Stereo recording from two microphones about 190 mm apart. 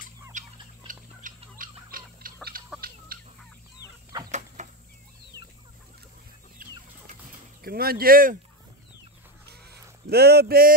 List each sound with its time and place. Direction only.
0.3 s clock: 40° right (ahead or behind)
2.5 s fowl: 50° right (ahead or behind)
3.1 s chicken: 50° right (ahead or behind)
4.3 s bird flight: 40° right (ahead or behind)
6.6 s chicken: 45° right (ahead or behind)
7.6 s speech: 55° right (ahead or behind)
9.5 s a sound: 55° right (ahead or behind)